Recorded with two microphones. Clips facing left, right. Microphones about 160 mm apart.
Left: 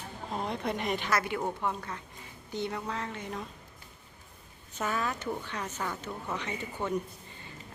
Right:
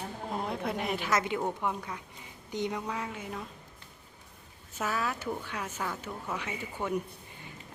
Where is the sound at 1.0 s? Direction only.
20° right (ahead or behind).